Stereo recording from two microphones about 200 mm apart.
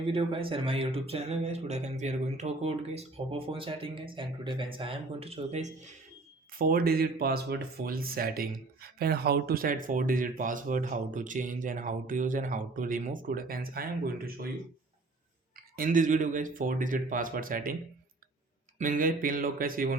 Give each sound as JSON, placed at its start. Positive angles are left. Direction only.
{"t": 0.0, "sound": "speech", "side_deg": -25}
{"t": 6.6, "sound": "speech", "side_deg": -45}
{"t": 15.5, "sound": "speech", "side_deg": -45}
{"t": 18.8, "sound": "speech", "side_deg": -45}